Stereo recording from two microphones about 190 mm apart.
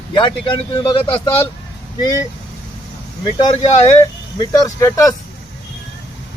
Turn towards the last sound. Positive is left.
turn(degrees=15)  # may be behind; listen again after turning